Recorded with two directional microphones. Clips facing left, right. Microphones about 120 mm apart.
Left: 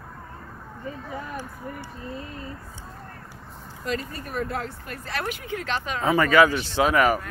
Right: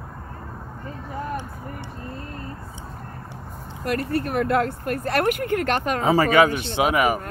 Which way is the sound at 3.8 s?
65° right (ahead or behind).